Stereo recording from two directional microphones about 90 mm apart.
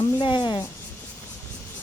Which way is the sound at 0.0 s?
60° left (ahead or behind).